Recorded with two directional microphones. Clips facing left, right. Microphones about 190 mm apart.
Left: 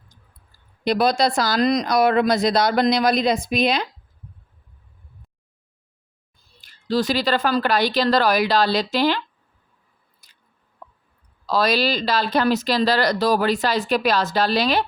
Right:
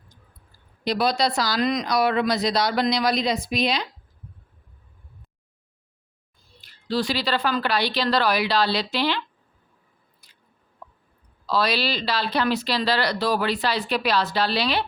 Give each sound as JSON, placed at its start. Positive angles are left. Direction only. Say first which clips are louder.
{"t": 0.9, "sound": "speech", "louder": "left 4 dB", "side_deg": 50}
{"t": 6.6, "sound": "speech", "louder": "left 4 dB", "side_deg": 45}
{"t": 10.2, "sound": "chewing", "louder": "right 2 dB", "side_deg": 45}
{"t": 11.4, "sound": "speech", "louder": "left 4 dB", "side_deg": 45}